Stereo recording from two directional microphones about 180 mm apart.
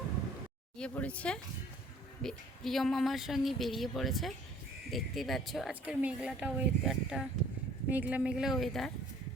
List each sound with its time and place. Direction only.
0.8 s a woman's voice: 5° left (ahead or behind)